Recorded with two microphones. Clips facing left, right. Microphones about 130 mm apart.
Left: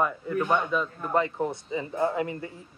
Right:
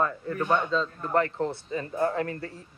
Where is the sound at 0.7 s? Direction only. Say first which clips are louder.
Right 1 dB; 15° left (ahead or behind).